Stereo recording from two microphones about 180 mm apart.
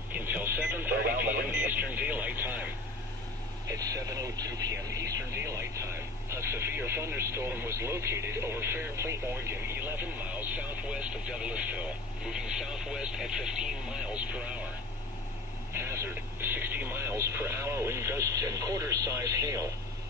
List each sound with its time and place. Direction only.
0.1 s radio: 10° right (ahead or behind)
0.9 s radio: 55° right (ahead or behind)
1.5 s speech: 10° right (ahead or behind)
15.7 s speech: 15° right (ahead or behind)